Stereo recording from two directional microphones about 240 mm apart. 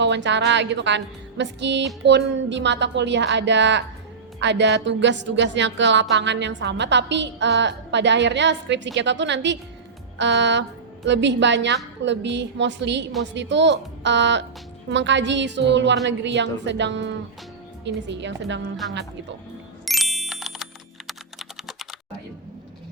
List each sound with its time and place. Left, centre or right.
0.0 s a woman's voice: right
19.8 s ding: centre
21.1 s typing: centre